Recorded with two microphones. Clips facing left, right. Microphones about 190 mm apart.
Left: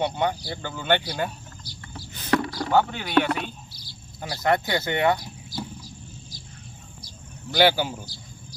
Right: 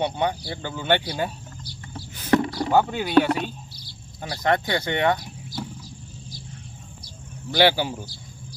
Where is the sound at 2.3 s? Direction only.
25° right (ahead or behind).